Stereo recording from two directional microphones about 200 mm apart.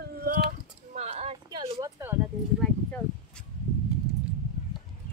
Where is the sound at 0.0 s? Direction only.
45° right (ahead or behind); by 1.7 s 30° right (ahead or behind).